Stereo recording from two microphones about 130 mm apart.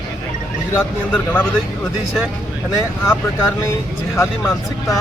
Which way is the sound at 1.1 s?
10° left (ahead or behind).